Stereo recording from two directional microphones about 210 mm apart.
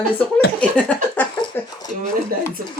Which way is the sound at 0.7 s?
5° left (ahead or behind).